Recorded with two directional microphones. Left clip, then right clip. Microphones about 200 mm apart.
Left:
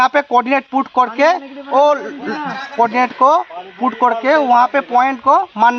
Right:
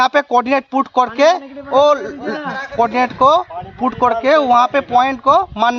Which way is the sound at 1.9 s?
35° right (ahead or behind).